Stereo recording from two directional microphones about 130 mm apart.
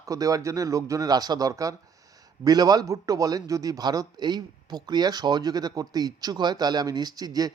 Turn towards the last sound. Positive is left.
turn(degrees=-30)  # may be behind; listen again after turning